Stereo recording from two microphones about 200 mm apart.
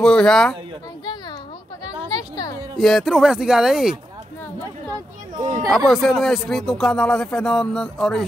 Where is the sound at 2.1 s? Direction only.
20° left (ahead or behind).